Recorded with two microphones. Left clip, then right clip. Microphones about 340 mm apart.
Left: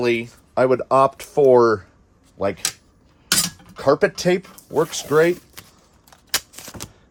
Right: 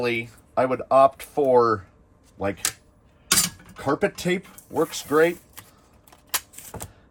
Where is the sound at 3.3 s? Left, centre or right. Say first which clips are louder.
Left 2 dB; centre.